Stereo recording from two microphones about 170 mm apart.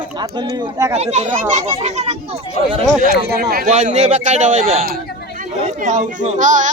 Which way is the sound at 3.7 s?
40° right (ahead or behind).